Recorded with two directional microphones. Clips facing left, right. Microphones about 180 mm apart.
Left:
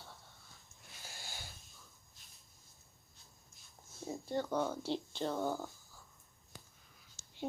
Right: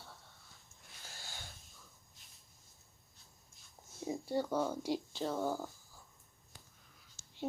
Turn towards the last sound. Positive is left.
turn(degrees=20)  # may be behind; listen again after turning